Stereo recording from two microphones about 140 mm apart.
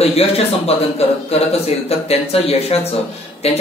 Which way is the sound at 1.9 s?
45° left (ahead or behind).